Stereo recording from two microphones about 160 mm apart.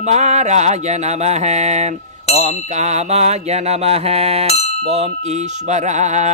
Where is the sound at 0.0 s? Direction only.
45° right (ahead or behind).